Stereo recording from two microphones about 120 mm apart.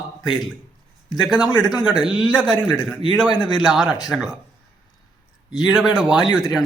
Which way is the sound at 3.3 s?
40° left (ahead or behind).